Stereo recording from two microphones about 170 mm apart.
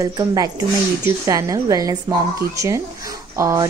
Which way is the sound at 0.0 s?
20° right (ahead or behind).